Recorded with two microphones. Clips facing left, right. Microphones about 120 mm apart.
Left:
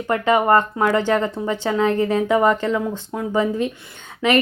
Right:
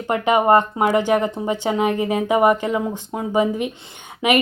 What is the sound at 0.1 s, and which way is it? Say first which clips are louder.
A woman's voice: right 1 dB; 20° right (ahead or behind).